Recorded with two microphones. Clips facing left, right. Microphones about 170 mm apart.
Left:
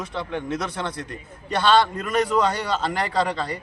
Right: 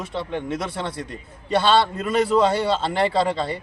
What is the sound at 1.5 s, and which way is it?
A man's voice, 25° right (ahead or behind).